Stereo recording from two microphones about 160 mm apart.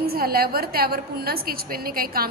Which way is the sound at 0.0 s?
70° right (ahead or behind).